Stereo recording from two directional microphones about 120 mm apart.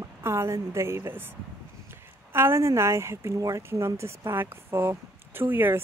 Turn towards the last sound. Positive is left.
turn(degrees=-15)  # may be behind; listen again after turning